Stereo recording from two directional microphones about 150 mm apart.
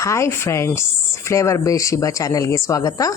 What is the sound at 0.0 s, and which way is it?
A woman's voice, 20° left (ahead or behind).